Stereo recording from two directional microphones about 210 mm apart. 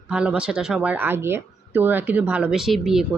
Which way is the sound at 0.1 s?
5° right (ahead or behind).